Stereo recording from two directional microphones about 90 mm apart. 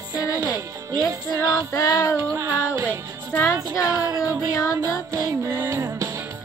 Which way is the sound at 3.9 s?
40° left (ahead or behind).